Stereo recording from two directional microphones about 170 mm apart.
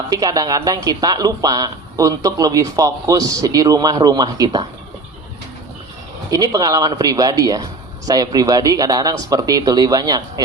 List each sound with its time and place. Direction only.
0.1 s speech: 20° right (ahead or behind)
6.3 s speech: 20° right (ahead or behind)